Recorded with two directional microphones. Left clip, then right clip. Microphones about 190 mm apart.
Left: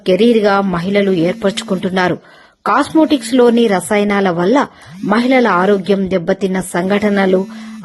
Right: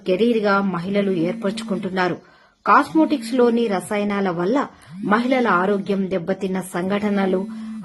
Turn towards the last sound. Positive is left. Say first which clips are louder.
# left 8 dB
turn(degrees=35)  # may be behind; listen again after turning